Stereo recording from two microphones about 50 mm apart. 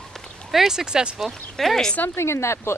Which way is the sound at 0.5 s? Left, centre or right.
Centre.